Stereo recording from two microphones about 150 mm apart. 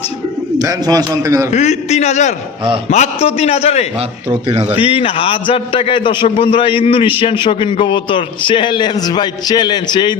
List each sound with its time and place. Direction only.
0.6 s a man's voice: 25° right (ahead or behind)
1.5 s a man's voice: 50° left (ahead or behind); by 10.2 s 30° left (ahead or behind)